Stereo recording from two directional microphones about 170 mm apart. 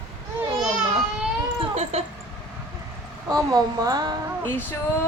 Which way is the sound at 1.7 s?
40° right (ahead or behind).